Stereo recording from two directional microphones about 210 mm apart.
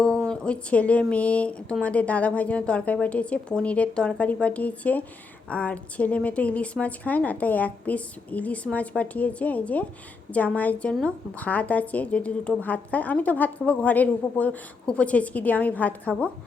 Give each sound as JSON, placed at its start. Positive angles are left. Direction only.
{"t": 0.0, "sound": "a woman's voice", "side_deg": 5}